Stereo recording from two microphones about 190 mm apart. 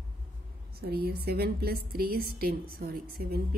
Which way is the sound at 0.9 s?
55° right (ahead or behind).